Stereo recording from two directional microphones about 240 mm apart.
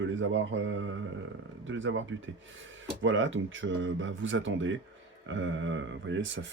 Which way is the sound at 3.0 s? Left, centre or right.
Right.